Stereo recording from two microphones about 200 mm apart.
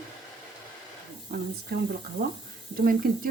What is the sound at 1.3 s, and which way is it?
Speech, 50° right (ahead or behind).